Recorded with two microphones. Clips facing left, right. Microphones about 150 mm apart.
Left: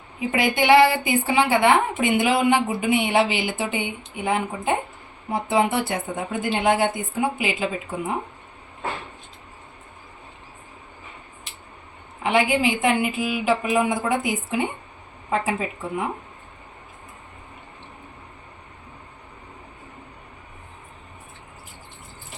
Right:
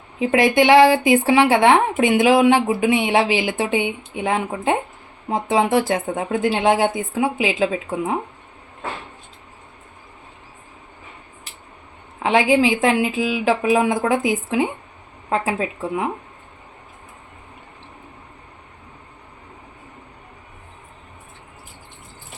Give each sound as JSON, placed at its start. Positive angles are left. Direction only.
{"t": 0.2, "sound": "speech", "side_deg": -90}
{"t": 12.2, "sound": "speech", "side_deg": -90}